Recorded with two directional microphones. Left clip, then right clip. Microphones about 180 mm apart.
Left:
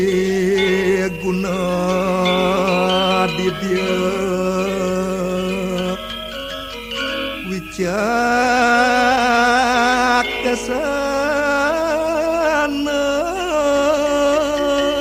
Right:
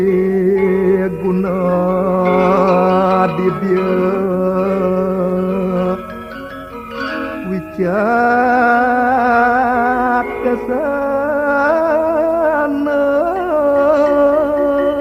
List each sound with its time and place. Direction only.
0.3 s music: 30° right (ahead or behind)
7.8 s music: 35° right (ahead or behind)